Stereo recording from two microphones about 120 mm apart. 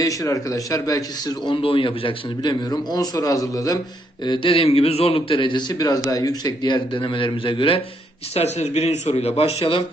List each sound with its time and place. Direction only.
0.0 s a man's voice: 30° left (ahead or behind)
1.5 s a man's voice: 45° left (ahead or behind)
2.5 s a man's voice: 35° left (ahead or behind)
4.3 s a man's voice: 45° left (ahead or behind)
8.4 s speech: 65° left (ahead or behind)